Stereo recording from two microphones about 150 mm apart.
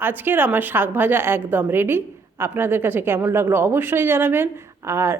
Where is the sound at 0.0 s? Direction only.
15° right (ahead or behind).